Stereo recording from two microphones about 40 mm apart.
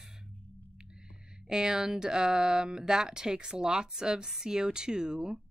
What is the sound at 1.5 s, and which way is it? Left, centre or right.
Speech, centre.